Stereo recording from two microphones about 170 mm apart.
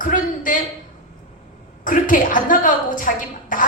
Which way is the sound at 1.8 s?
50° left (ahead or behind).